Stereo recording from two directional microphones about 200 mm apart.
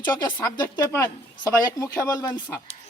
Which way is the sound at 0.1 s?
15° left (ahead or behind).